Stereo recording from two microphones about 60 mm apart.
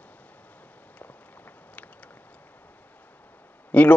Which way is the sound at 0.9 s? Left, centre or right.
Left.